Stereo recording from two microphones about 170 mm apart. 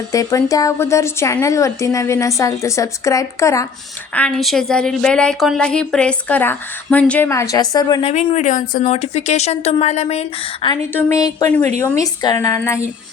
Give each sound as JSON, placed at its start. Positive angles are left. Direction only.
{"t": 0.1, "sound": "a woman's voice", "side_deg": 20}
{"t": 4.1, "sound": "a woman's voice", "side_deg": 5}
{"t": 8.0, "sound": "speech", "side_deg": 40}
{"t": 10.9, "sound": "a woman's voice", "side_deg": 20}